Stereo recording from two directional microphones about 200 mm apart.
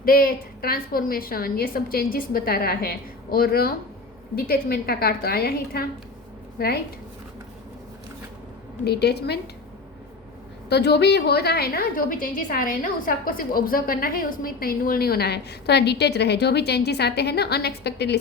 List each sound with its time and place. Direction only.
0.0 s a woman's voice: 45° left (ahead or behind)
8.8 s a woman's voice: 55° left (ahead or behind)
10.7 s a woman's voice: 55° left (ahead or behind)